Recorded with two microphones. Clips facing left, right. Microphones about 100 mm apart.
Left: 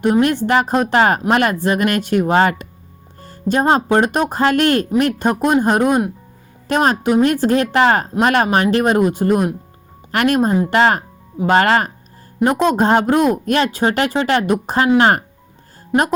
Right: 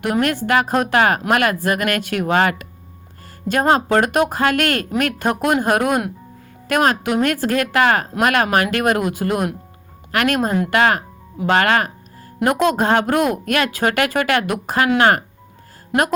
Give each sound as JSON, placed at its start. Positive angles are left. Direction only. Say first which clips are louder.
{"t": 0.0, "sound": "a woman's voice", "louder": "left 4 dB", "side_deg": 25}